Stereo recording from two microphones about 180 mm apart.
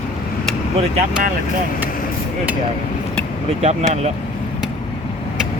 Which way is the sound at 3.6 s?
35° right (ahead or behind).